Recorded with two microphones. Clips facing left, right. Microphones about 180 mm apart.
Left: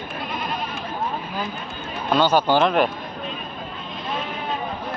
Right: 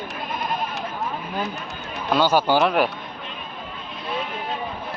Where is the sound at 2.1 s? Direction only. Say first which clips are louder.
Left 1 dB; 10° right (ahead or behind).